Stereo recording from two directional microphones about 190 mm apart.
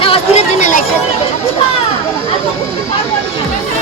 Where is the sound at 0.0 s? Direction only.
30° left (ahead or behind).